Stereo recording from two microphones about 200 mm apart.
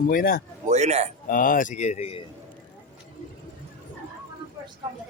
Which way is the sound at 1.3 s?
45° left (ahead or behind).